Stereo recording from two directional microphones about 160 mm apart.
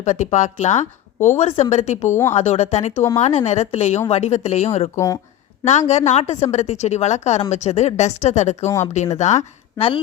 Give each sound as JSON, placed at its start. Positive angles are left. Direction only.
{"t": 0.0, "sound": "speech", "side_deg": 50}
{"t": 4.9, "sound": "speech", "side_deg": 20}
{"t": 5.9, "sound": "speech", "side_deg": 45}
{"t": 8.6, "sound": "speech", "side_deg": 15}
{"t": 9.1, "sound": "speech", "side_deg": 45}